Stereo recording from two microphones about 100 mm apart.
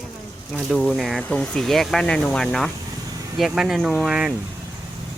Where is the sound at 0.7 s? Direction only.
10° left (ahead or behind).